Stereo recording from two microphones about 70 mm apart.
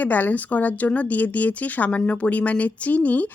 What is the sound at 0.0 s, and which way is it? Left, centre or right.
A woman's voice, left.